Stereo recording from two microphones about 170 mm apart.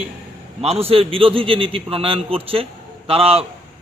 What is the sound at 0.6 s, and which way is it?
A man's voice, 35° right (ahead or behind).